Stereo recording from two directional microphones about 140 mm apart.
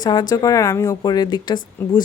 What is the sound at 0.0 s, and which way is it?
Speech, 30° left (ahead or behind).